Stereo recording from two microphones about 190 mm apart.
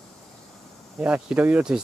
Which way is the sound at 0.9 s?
5° right (ahead or behind).